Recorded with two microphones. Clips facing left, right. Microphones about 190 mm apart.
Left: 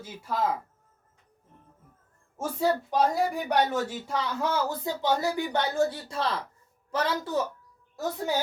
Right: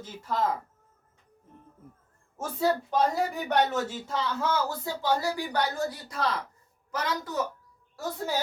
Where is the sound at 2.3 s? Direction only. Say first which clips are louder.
Left 1 dB; 10° left (ahead or behind); by 7.4 s 30° left (ahead or behind).